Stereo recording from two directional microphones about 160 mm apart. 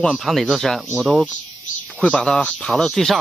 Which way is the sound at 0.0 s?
Centre (ahead or behind).